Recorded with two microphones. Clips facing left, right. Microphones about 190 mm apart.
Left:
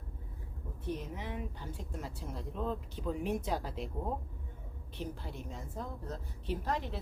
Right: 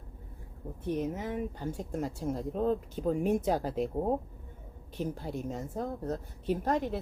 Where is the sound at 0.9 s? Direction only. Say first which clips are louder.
Right 8 dB; 45° right (ahead or behind).